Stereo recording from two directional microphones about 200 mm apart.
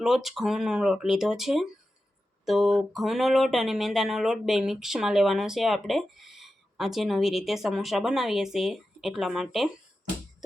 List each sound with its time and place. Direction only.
0.0 s speech: centre (ahead or behind)